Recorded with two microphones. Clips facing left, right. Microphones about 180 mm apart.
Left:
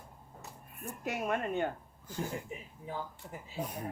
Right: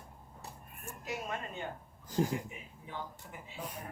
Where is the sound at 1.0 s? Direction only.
60° left (ahead or behind).